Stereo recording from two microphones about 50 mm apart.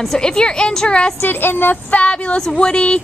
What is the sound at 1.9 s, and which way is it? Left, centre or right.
Speech, left.